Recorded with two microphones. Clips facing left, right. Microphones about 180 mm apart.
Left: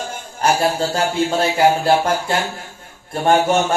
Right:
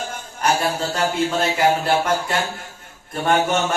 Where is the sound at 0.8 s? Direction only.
30° left (ahead or behind).